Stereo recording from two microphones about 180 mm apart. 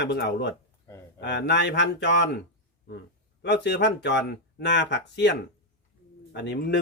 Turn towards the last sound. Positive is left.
turn(degrees=70)  # may be behind; listen again after turning